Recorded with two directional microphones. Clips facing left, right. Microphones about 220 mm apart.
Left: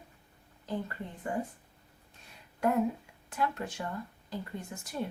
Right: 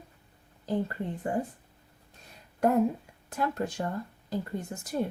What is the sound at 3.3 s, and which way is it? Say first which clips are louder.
Speech: right 3 dB; 40° right (ahead or behind).